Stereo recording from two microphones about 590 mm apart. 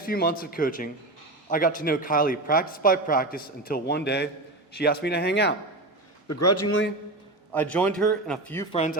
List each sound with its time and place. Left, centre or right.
0.0 s a man's voice: centre
7.5 s a man's voice: centre